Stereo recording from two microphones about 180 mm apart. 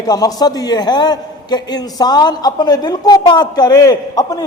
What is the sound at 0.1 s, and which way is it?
A man's voice, 20° left (ahead or behind).